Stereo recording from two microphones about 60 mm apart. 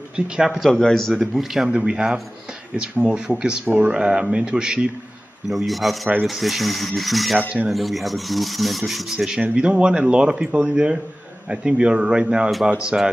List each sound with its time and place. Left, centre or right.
0.1 s speech: centre
0.6 s speech: centre
1.1 s speech: centre
5.5 s speech: centre
9.1 s speech: centre